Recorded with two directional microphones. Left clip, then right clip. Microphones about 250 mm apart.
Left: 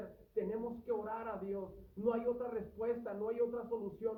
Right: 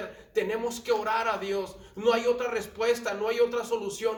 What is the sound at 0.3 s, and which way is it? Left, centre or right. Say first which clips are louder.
A man's voice: right 11 dB; centre.